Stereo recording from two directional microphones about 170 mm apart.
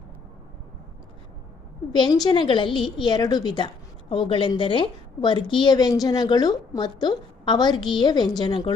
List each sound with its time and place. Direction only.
1.9 s a woman's voice: 25° left (ahead or behind)